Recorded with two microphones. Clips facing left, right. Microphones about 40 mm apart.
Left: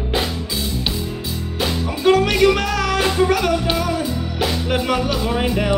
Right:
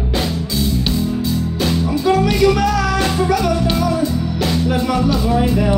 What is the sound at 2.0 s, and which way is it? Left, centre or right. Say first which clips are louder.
Music: left 1 dB; left.